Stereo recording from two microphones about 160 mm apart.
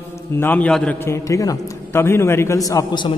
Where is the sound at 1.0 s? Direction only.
20° left (ahead or behind).